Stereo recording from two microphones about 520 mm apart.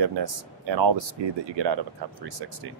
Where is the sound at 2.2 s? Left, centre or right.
Right.